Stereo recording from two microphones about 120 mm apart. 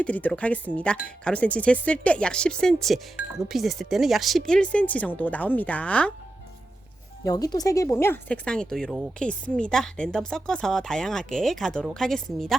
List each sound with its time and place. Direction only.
0.0 s speech: 10° left (ahead or behind)
7.3 s speech: 30° left (ahead or behind); by 12.5 s centre (ahead or behind)